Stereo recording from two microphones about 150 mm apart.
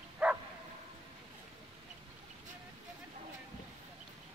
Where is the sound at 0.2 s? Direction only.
10° right (ahead or behind).